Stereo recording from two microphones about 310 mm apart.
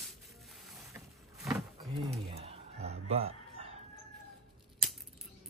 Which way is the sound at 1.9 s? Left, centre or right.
Centre.